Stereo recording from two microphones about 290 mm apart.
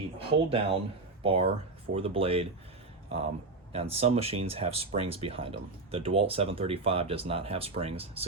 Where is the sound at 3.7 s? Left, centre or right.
Right.